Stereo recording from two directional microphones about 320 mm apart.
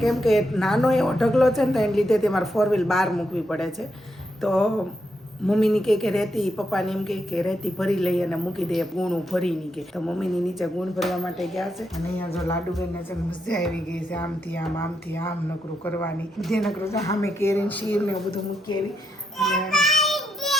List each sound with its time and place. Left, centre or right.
0.0 s a woman's voice: centre
4.4 s a sound: centre
5.5 s a woman's voice: centre
13.5 s a woman's voice: centre
19.4 s child singing: centre